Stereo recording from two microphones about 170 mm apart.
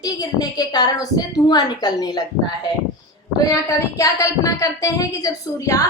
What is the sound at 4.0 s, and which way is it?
A woman's voice, 20° left (ahead or behind).